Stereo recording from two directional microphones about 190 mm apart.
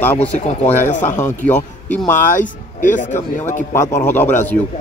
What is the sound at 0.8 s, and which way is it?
Speech, 40° left (ahead or behind).